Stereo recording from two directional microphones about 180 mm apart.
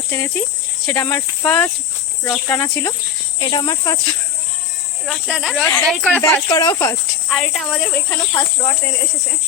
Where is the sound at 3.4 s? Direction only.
25° left (ahead or behind).